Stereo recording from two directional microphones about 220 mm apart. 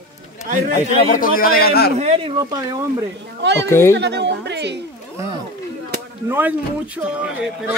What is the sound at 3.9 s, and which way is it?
Speech, 50° right (ahead or behind).